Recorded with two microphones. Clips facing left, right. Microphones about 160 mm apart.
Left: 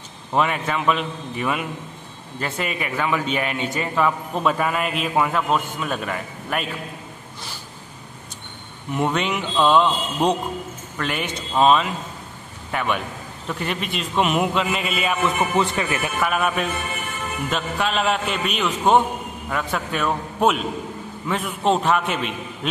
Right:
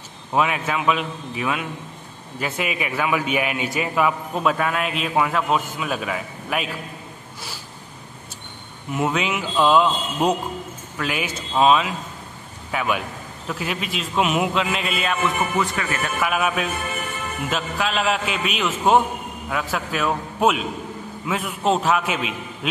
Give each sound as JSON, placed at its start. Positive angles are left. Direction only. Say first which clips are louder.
{"t": 0.3, "sound": "a man's voice", "louder": "even", "side_deg": -5}
{"t": 8.9, "sound": "a man's voice", "louder": "even", "side_deg": -5}
{"t": 15.5, "sound": "speech", "louder": "left 2 dB", "side_deg": 25}
{"t": 16.2, "sound": "a man's voice", "louder": "even", "side_deg": 0}